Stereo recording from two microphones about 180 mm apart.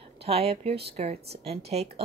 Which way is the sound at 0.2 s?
35° right (ahead or behind).